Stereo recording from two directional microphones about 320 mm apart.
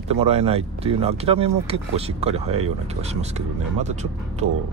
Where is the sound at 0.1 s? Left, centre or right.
Centre.